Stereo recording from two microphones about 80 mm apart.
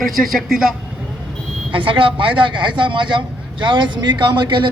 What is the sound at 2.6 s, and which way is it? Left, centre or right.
Speech, right.